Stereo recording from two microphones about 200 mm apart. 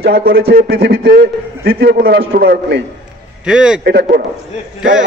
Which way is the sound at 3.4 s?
5° right (ahead or behind).